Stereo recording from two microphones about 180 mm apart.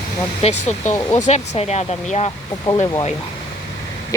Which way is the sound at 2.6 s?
25° left (ahead or behind).